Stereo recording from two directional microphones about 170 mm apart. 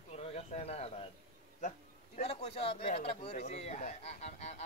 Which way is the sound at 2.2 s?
35° left (ahead or behind).